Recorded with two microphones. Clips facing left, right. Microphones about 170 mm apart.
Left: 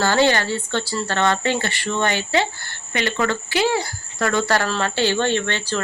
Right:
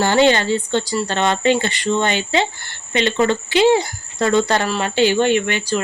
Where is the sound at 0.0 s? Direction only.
20° right (ahead or behind).